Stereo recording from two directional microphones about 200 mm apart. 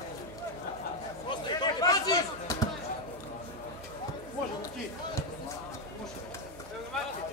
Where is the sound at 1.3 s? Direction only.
20° left (ahead or behind).